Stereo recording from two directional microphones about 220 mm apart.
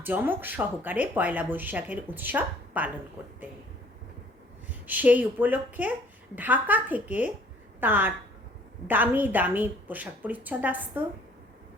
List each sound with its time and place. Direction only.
0.0 s speech: 10° right (ahead or behind)
4.9 s speech: 5° right (ahead or behind)